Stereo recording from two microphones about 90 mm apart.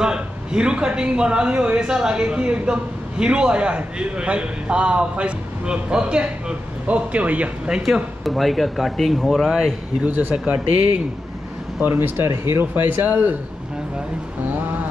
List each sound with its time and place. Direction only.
0.0 s a man's voice: 10° right (ahead or behind)
10.0 s a man's voice: 20° right (ahead or behind)
11.8 s speech: 25° right (ahead or behind)